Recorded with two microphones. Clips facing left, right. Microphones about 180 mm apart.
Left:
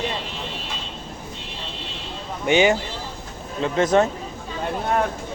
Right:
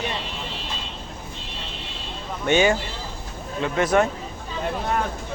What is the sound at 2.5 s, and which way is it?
Speech, 15° left (ahead or behind).